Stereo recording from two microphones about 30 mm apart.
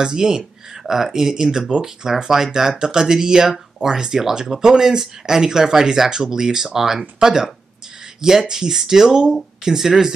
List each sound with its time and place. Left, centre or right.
0.0 s speech: centre
8.5 s speech: centre